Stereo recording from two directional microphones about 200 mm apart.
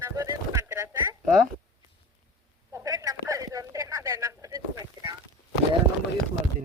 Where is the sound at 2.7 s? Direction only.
15° right (ahead or behind).